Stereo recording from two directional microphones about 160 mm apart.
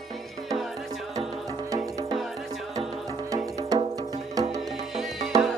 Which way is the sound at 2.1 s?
Centre (ahead or behind).